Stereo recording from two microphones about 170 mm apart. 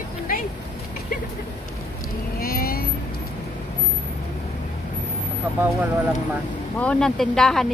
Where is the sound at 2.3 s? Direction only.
60° left (ahead or behind).